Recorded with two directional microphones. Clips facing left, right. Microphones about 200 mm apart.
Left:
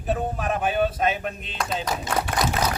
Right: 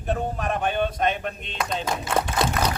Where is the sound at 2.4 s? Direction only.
30° right (ahead or behind).